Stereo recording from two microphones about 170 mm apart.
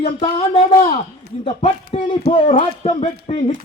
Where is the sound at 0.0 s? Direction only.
35° left (ahead or behind).